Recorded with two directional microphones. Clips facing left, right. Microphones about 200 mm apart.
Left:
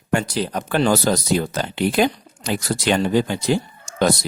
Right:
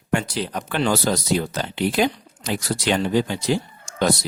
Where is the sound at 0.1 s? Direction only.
40° left (ahead or behind).